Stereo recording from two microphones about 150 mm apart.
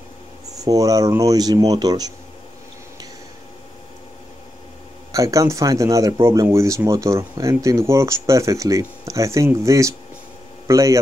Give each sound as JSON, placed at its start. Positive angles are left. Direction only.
{"t": 0.6, "sound": "speech", "side_deg": -25}
{"t": 5.1, "sound": "speech", "side_deg": -20}